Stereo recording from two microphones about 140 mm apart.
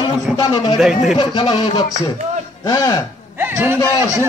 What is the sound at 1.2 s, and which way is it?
Speech, 30° left (ahead or behind).